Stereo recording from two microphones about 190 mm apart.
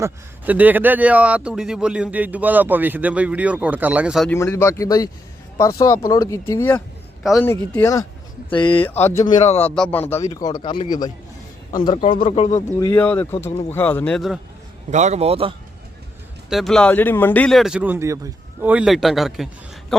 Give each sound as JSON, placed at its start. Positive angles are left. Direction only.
{"t": 0.0, "sound": "a man's voice", "side_deg": -10}
{"t": 4.3, "sound": "speech", "side_deg": 10}
{"t": 8.4, "sound": "speech", "side_deg": 25}
{"t": 8.9, "sound": "speech", "side_deg": 10}
{"t": 9.3, "sound": "speech", "side_deg": 35}
{"t": 9.6, "sound": "speech", "side_deg": 5}
{"t": 12.8, "sound": "speech", "side_deg": 10}
{"t": 14.8, "sound": "a man's voice", "side_deg": -35}
{"t": 16.5, "sound": "speech", "side_deg": 0}